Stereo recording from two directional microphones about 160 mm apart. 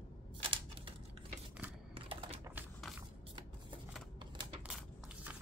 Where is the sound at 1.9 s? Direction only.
35° right (ahead or behind).